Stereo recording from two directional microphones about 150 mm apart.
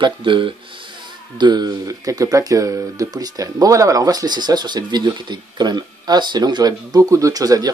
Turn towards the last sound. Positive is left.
turn(degrees=-25)  # may be behind; listen again after turning